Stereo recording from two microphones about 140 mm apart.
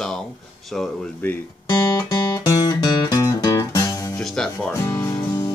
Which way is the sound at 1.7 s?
25° left (ahead or behind).